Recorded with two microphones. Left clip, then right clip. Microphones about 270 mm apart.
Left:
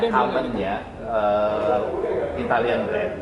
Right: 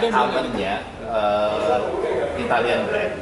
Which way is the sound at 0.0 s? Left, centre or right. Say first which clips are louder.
Right 1 dB; centre.